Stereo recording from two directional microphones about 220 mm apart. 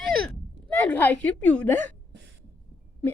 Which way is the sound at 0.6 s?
5° left (ahead or behind).